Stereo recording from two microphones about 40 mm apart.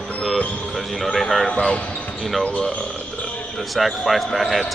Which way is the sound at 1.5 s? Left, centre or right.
Left.